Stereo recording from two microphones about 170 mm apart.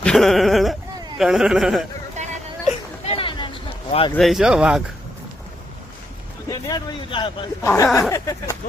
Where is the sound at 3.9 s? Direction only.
35° left (ahead or behind).